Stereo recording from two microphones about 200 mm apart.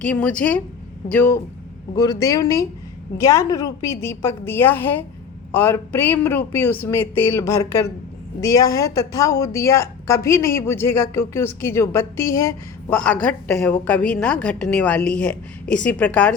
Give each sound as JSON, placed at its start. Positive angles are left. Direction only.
{"t": 0.0, "sound": "a woman's voice", "side_deg": 5}